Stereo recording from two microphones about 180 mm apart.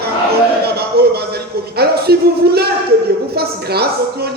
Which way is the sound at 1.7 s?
60° right (ahead or behind).